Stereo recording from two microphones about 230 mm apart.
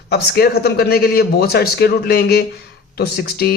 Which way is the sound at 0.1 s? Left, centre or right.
Left.